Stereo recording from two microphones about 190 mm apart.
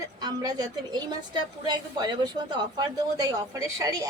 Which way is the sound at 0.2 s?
20° right (ahead or behind).